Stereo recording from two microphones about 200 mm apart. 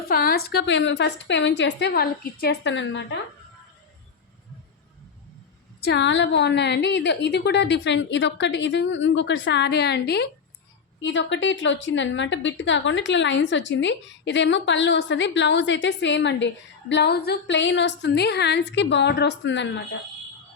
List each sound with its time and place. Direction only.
0.0 s a woman's voice: 45° left (ahead or behind); by 3.2 s 65° left (ahead or behind)
5.8 s a woman's voice: 60° left (ahead or behind)